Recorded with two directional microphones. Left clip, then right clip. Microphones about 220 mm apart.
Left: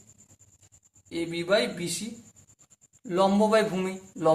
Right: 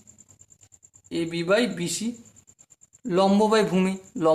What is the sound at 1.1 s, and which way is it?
Speech, 40° right (ahead or behind).